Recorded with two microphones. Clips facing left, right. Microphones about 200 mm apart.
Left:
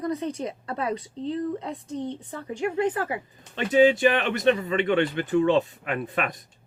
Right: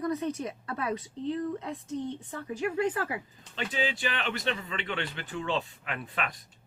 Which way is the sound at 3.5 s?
45° left (ahead or behind).